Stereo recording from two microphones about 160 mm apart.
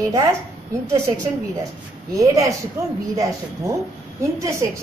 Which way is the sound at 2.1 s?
20° right (ahead or behind).